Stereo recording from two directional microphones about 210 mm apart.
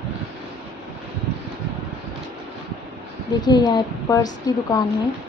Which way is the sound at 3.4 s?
20° left (ahead or behind).